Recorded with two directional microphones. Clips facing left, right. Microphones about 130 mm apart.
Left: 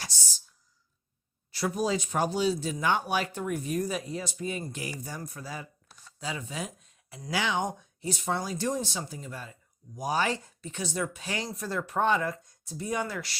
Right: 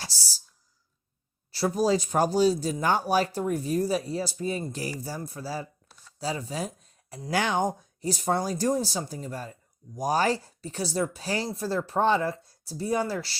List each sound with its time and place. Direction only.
0.0 s speech: 35° right (ahead or behind)
1.5 s speech: 35° right (ahead or behind)